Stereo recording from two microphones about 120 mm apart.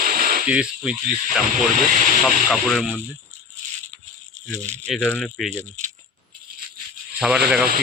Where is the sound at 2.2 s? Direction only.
Centre (ahead or behind).